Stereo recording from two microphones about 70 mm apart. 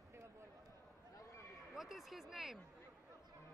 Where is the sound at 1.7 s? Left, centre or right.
Centre.